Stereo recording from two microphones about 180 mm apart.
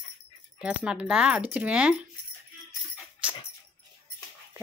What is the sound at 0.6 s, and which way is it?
Speech, 5° right (ahead or behind).